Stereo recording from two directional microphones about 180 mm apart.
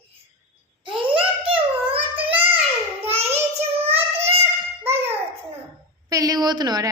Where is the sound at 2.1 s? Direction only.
10° right (ahead or behind).